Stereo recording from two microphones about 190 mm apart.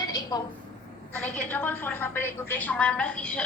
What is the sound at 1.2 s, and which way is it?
A woman's voice, 10° left (ahead or behind).